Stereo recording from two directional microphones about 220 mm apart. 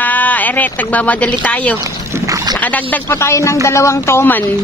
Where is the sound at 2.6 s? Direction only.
5° left (ahead or behind).